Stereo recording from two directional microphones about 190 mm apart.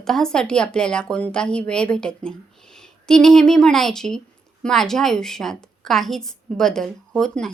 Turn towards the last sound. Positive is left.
turn(degrees=0)  # may be behind; listen again after turning